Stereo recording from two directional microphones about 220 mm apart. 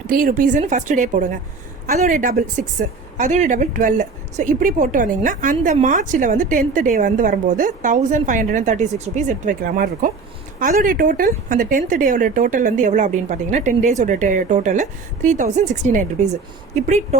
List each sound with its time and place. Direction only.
0.1 s a woman's voice: 40° right (ahead or behind)